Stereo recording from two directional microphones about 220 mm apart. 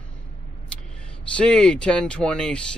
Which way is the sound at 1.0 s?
5° left (ahead or behind).